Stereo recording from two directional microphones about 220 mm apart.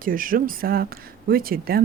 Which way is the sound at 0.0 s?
40° right (ahead or behind).